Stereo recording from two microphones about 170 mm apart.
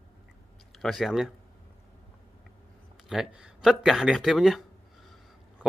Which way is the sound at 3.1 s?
5° right (ahead or behind).